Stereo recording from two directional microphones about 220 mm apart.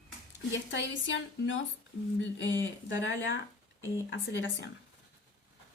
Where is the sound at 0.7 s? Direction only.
55° left (ahead or behind).